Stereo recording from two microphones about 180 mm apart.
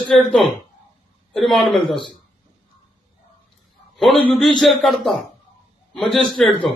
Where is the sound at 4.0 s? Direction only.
Centre (ahead or behind).